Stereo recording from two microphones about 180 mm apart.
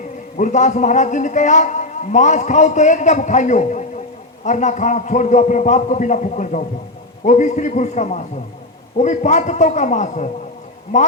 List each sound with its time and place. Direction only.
0.3 s a man's voice: 45° left (ahead or behind)